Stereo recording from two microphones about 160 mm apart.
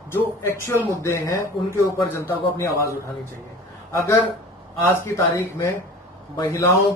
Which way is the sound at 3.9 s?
20° left (ahead or behind).